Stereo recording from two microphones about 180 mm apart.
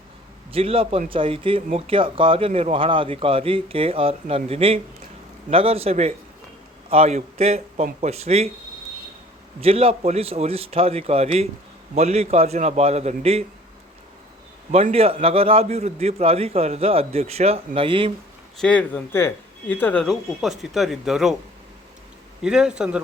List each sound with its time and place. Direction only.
0.5 s speech: 30° right (ahead or behind)
9.6 s speech: 35° right (ahead or behind)
14.7 s speech: 35° right (ahead or behind)
18.5 s speech: 5° left (ahead or behind)
22.4 s speech: 5° right (ahead or behind)